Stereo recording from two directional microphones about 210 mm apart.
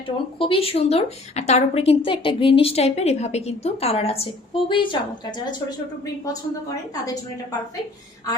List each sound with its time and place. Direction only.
0.3 s a woman's voice: 25° left (ahead or behind)